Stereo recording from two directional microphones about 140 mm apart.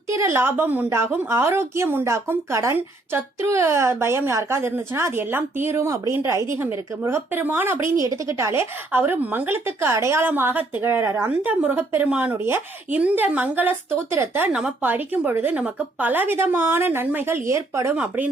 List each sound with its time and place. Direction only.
0.1 s speech: 20° right (ahead or behind)
17.9 s speech: 10° right (ahead or behind)